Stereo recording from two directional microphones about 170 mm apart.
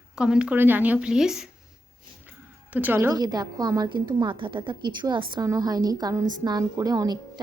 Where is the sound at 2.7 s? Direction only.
10° right (ahead or behind).